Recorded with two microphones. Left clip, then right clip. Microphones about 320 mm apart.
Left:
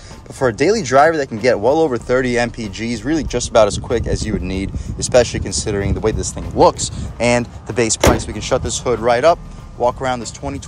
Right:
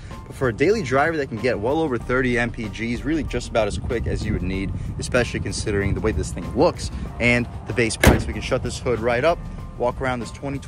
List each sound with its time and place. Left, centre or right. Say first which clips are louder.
0.4 s speech: left 5 dB; centre